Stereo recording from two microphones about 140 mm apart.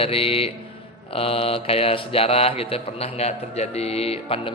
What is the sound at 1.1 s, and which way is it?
Mantra, 40° left (ahead or behind).